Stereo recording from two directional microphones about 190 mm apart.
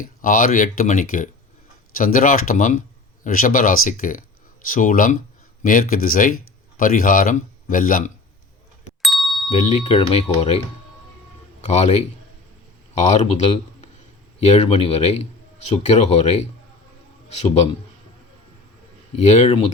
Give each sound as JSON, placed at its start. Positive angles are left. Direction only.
{"t": 0.0, "sound": "speech", "side_deg": 45}
{"t": 9.0, "sound": "ding", "side_deg": 0}
{"t": 9.6, "sound": "speech", "side_deg": 35}
{"t": 11.6, "sound": "a man's voice", "side_deg": 35}
{"t": 19.1, "sound": "speech", "side_deg": 35}